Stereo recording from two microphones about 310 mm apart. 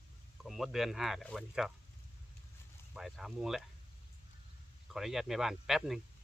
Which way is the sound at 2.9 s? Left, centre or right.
Centre.